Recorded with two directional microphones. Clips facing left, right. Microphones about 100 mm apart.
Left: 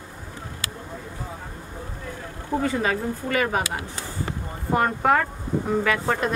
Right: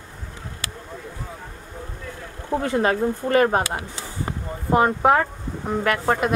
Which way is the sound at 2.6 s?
50° right (ahead or behind).